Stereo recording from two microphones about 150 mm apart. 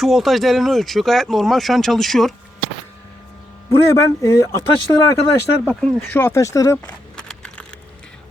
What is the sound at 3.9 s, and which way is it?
Speech, 20° left (ahead or behind).